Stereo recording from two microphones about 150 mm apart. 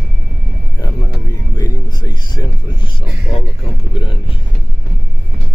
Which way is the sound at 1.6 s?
25° left (ahead or behind).